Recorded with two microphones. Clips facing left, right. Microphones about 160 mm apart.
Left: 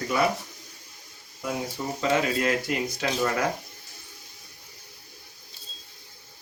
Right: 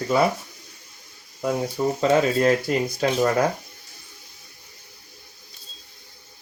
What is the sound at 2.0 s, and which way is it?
Speech, 35° right (ahead or behind).